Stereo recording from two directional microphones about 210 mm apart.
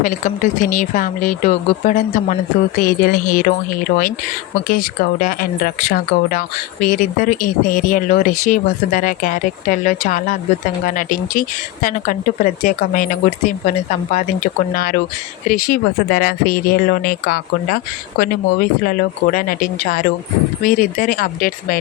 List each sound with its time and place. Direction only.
0.0 s a woman's voice: 40° left (ahead or behind)
4.7 s a woman's voice: 45° left (ahead or behind)